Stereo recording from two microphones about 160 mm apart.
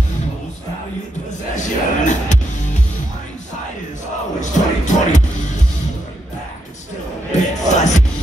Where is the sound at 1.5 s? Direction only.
50° left (ahead or behind).